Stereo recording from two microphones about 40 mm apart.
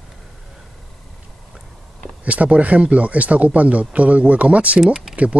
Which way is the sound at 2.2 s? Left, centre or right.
Right.